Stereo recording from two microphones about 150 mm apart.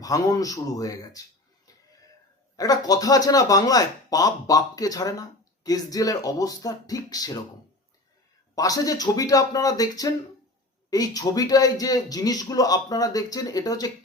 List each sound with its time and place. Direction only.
0.0 s speech: 25° left (ahead or behind)
2.6 s speech: 25° left (ahead or behind)
8.5 s speech: 25° left (ahead or behind)